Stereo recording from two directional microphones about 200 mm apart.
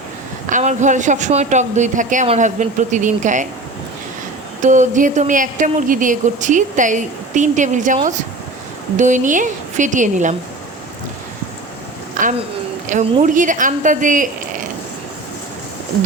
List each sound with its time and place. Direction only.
0.5 s speech: 35° right (ahead or behind)
4.6 s speech: 40° right (ahead or behind)
9.0 s speech: 40° right (ahead or behind)
12.2 s a sound: 40° right (ahead or behind)
12.9 s speech: 40° right (ahead or behind)